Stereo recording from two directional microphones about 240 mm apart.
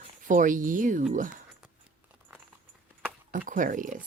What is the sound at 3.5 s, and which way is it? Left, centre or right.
Speech, right.